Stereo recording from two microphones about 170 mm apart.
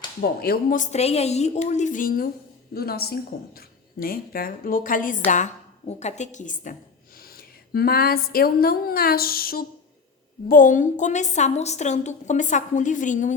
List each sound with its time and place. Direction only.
0.2 s a woman's voice: 65° left (ahead or behind)
2.7 s a woman's voice: 65° left (ahead or behind); by 6.7 s 50° left (ahead or behind)
7.7 s a woman's voice: 65° left (ahead or behind); by 13.3 s 45° left (ahead or behind)